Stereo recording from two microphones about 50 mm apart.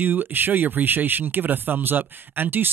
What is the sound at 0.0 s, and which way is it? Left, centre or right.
Speech, right.